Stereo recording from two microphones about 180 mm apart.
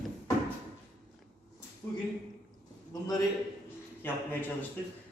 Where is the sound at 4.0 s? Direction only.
10° left (ahead or behind).